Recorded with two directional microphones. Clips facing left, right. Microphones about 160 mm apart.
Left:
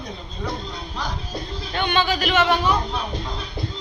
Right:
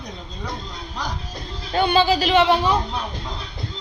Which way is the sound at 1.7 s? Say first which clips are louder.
Right 5 dB; 35° right (ahead or behind).